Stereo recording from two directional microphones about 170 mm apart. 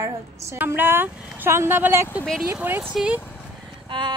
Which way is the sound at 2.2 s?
5° left (ahead or behind).